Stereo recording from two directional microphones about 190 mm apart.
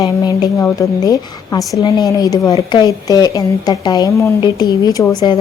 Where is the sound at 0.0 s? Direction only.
20° left (ahead or behind).